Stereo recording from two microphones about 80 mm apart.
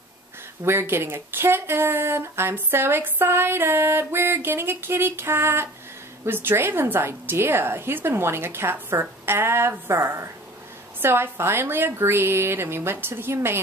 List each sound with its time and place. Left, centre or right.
0.7 s a woman's voice: right